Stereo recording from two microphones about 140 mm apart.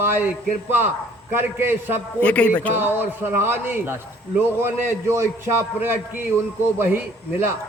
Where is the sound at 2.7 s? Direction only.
15° right (ahead or behind).